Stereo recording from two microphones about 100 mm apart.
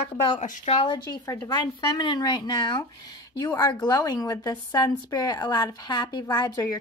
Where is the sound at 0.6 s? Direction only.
60° left (ahead or behind).